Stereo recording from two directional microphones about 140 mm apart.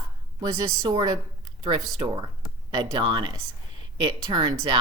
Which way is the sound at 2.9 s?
35° right (ahead or behind).